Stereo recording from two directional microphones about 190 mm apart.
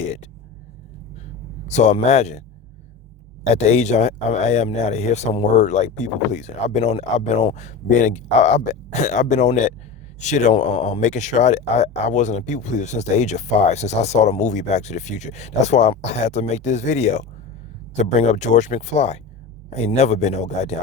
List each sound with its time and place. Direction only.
1.6 s speech: 40° left (ahead or behind)
3.4 s speech: 35° left (ahead or behind)